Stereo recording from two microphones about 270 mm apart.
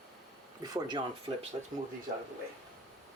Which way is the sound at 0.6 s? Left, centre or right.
Centre.